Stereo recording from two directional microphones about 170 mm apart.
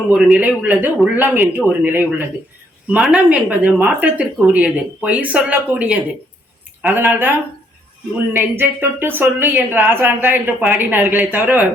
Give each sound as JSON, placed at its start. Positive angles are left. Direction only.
{"t": 0.1, "sound": "speech", "side_deg": -5}
{"t": 8.5, "sound": "speech", "side_deg": -15}